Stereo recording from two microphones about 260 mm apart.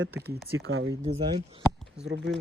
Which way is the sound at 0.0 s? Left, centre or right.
Right.